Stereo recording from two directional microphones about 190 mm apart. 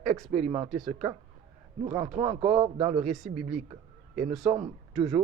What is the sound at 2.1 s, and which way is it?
Speech, 35° right (ahead or behind).